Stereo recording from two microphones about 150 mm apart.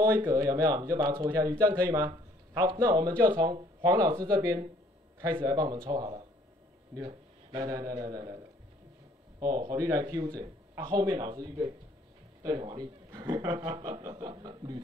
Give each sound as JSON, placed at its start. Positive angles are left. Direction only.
{"t": 0.3, "sound": "speech", "side_deg": -25}
{"t": 9.4, "sound": "speech", "side_deg": -25}